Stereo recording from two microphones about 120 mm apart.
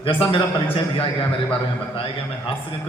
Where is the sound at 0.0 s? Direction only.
50° left (ahead or behind).